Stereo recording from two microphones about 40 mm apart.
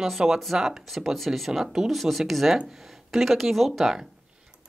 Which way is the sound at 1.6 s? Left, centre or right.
Centre.